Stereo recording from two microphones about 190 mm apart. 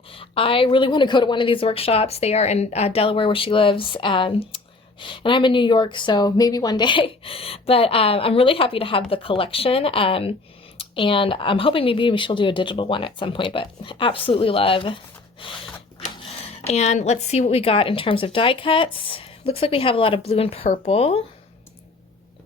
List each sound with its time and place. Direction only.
0.1 s a woman's voice: 30° left (ahead or behind)
16.6 s a woman's voice: 35° left (ahead or behind)